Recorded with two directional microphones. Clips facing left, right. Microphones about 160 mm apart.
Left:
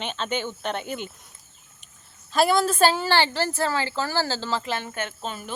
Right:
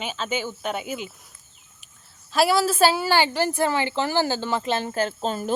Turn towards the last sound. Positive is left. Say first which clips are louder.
# right 7 dB
turn(degrees=-40)  # may be behind; listen again after turning